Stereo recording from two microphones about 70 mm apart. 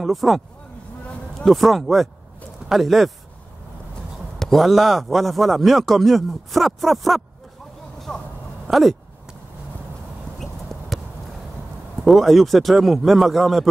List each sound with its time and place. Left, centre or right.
0.0 s a man's voice: centre
1.4 s a man's voice: centre
4.4 s a man's voice: centre
8.6 s a sound: centre
10.4 s a sound: centre
12.0 s a man's voice: centre